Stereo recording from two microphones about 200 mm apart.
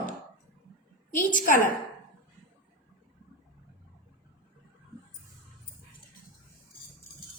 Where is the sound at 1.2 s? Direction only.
40° left (ahead or behind).